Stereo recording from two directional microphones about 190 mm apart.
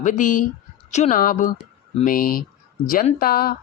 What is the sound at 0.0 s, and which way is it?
Speech, 45° left (ahead or behind).